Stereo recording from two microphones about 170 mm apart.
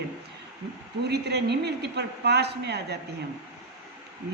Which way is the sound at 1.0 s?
75° right (ahead or behind).